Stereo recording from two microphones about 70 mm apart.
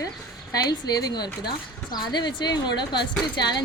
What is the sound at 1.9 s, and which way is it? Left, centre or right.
Speech, left.